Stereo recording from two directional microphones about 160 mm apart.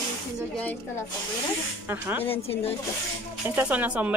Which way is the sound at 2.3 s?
40° left (ahead or behind).